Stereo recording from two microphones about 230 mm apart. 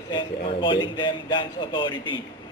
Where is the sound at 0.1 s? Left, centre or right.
Left.